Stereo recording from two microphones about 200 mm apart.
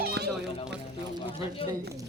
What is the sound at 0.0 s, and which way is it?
Music, 55° right (ahead or behind).